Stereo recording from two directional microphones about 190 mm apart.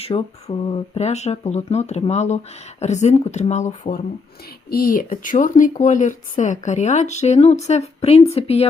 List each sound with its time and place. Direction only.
0.0 s speech: 30° left (ahead or behind)
4.7 s speech: 50° left (ahead or behind); by 8.6 s 35° left (ahead or behind)